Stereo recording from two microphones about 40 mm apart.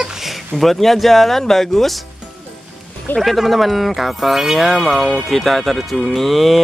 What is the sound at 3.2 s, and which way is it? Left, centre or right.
Speech, centre.